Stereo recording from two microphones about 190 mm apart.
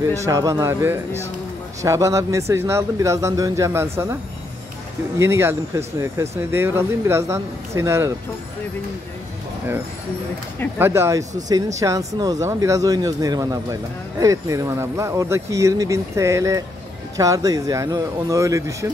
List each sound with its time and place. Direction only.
0.2 s speech: 15° right (ahead or behind)
5.2 s speech: 15° right (ahead or behind)
10.8 s speech: 15° right (ahead or behind)